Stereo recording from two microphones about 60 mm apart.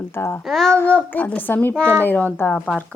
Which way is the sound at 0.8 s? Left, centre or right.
Left.